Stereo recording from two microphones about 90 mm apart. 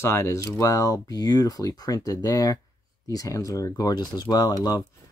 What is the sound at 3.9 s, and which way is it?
Speech, 50° left (ahead or behind).